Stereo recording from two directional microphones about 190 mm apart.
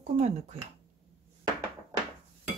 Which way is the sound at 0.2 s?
35° right (ahead or behind).